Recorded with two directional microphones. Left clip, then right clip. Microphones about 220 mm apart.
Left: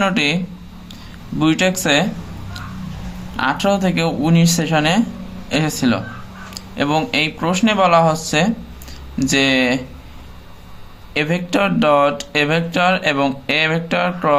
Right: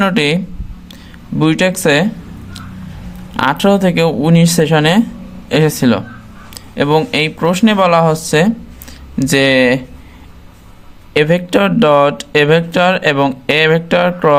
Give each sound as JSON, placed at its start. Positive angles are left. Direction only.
{"t": 0.0, "sound": "speech", "side_deg": -35}
{"t": 1.4, "sound": "speech", "side_deg": -35}
{"t": 3.3, "sound": "speech", "side_deg": -40}
{"t": 11.1, "sound": "speech", "side_deg": -40}